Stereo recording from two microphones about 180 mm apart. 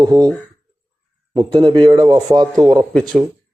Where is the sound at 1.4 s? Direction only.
25° right (ahead or behind).